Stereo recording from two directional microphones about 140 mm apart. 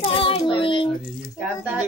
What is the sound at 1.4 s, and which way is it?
Speech, 10° right (ahead or behind).